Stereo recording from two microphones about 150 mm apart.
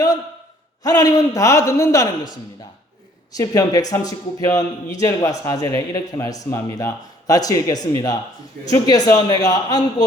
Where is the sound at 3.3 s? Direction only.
25° left (ahead or behind).